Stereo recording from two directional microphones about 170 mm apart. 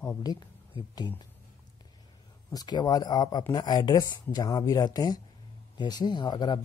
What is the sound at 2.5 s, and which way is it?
Speech, 25° left (ahead or behind).